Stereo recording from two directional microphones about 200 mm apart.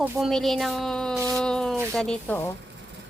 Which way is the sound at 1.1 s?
15° right (ahead or behind).